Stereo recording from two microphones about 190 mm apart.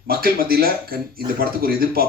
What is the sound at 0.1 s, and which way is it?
Speech, 50° right (ahead or behind).